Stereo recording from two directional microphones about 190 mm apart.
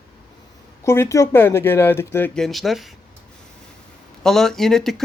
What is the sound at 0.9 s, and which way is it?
Speech, 15° left (ahead or behind).